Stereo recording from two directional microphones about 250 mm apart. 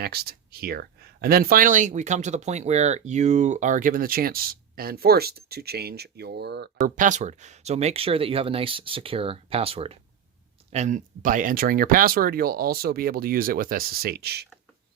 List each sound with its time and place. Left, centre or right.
0.0 s speech: right